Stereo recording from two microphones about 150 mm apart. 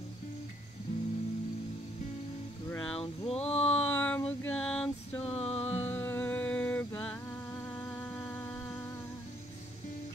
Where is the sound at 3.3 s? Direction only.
45° left (ahead or behind).